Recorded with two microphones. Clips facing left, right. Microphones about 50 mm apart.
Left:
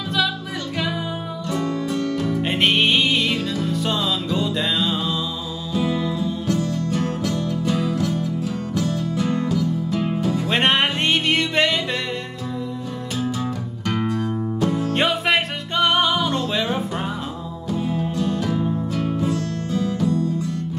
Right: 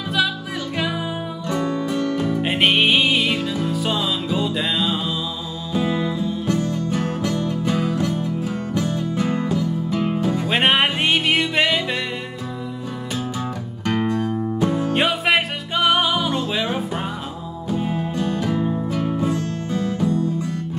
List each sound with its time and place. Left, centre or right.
1.5 s music: right
2.4 s music: centre
6.5 s music: right
10.5 s music: centre
13.8 s music: centre
17.6 s music: centre